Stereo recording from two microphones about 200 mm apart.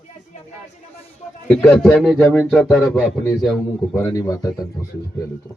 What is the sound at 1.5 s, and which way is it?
A man's voice, 5° left (ahead or behind).